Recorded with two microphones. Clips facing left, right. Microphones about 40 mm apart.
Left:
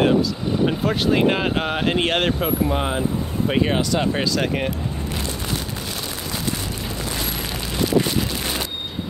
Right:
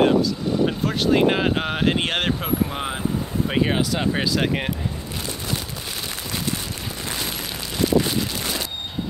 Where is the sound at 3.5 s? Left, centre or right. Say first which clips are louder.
Left 2 dB; centre.